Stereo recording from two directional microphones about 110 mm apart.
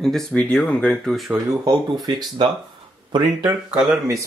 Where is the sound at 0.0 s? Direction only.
5° left (ahead or behind).